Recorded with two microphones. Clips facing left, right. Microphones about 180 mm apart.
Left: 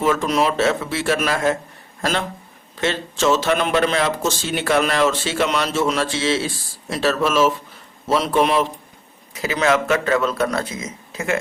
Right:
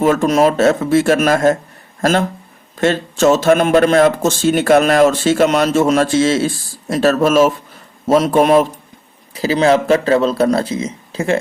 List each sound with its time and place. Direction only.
0.0 s speech: 50° right (ahead or behind)
9.3 s a man's voice: 30° right (ahead or behind)